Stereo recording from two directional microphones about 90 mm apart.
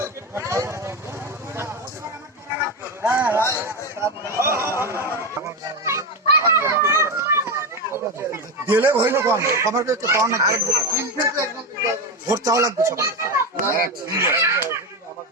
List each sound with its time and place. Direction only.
0.0 s vehicle: 30° right (ahead or behind)
3.0 s speech: 25° right (ahead or behind)
4.7 s a sound: 30° right (ahead or behind)
5.4 s children playing: 35° right (ahead or behind)
8.3 s speech: 20° right (ahead or behind)
14.2 s a sound: 30° right (ahead or behind)